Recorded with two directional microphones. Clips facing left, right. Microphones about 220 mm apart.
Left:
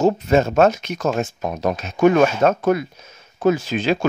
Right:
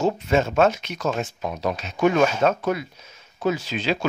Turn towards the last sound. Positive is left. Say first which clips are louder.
# left 5 dB
turn(degrees=50)  # may be behind; listen again after turning